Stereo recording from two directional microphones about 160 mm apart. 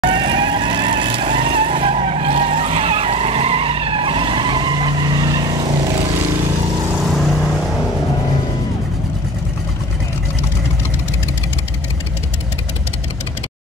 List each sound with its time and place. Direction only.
0.0 s vehicle: 30° right (ahead or behind)
7.1 s vehicle: centre (ahead or behind)